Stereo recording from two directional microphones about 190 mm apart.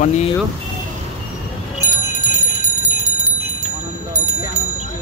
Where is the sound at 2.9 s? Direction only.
40° right (ahead or behind).